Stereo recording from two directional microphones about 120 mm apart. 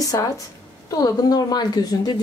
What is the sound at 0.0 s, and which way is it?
A woman's voice, 30° left (ahead or behind).